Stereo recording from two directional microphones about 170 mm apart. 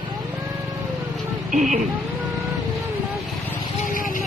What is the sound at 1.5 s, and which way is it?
Vehicle, 50° right (ahead or behind).